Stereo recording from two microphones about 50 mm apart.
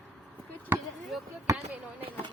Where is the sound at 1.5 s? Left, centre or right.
Right.